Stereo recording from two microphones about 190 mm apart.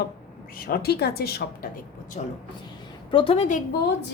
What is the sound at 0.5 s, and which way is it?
A woman's voice, 50° left (ahead or behind).